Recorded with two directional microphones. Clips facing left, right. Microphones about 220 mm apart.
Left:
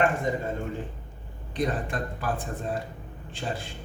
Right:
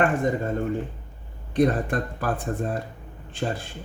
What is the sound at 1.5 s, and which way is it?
Speech, 55° right (ahead or behind).